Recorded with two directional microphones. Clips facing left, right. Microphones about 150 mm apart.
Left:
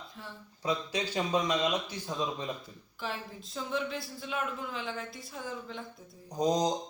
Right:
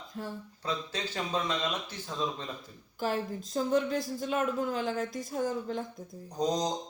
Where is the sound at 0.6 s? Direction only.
15° left (ahead or behind).